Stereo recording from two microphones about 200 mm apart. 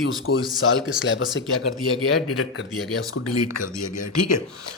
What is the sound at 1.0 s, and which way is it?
Speech, 70° left (ahead or behind).